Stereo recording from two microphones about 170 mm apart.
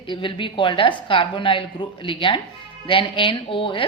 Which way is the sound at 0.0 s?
30° left (ahead or behind).